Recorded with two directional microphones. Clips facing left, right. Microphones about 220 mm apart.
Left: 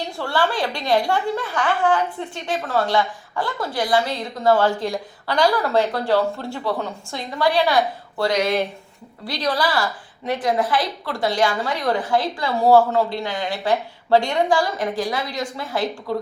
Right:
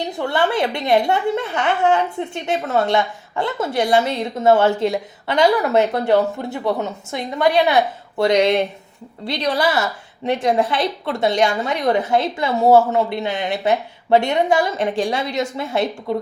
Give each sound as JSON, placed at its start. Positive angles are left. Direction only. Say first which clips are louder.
{"t": 0.0, "sound": "a woman's voice", "louder": "right 3 dB", "side_deg": -20}